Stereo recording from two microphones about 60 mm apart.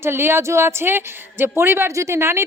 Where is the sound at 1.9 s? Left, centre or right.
Right.